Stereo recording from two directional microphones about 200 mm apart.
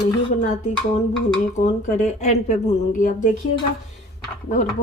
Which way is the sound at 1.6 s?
35° left (ahead or behind).